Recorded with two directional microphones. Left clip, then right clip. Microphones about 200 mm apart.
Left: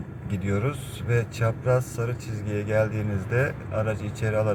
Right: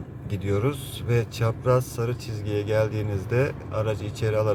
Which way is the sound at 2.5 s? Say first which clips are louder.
Right 1 dB; 15° right (ahead or behind).